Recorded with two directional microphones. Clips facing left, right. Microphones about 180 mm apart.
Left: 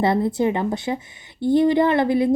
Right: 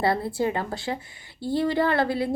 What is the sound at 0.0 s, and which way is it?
A woman's voice, 20° left (ahead or behind).